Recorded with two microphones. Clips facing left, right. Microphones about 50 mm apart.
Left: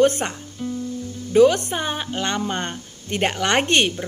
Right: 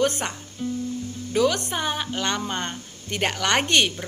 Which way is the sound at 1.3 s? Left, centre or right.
Left.